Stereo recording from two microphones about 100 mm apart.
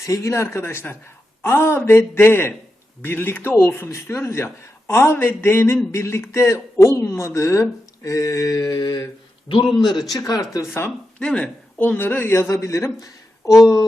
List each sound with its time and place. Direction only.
0.0 s a man's voice: 30° left (ahead or behind); by 10.0 s 50° left (ahead or behind)
10.2 s speech: 35° left (ahead or behind)
11.2 s a man's voice: 10° left (ahead or behind); by 13.6 s 35° left (ahead or behind)